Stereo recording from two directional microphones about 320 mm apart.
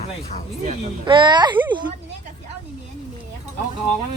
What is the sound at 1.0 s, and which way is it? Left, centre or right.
Speech, centre.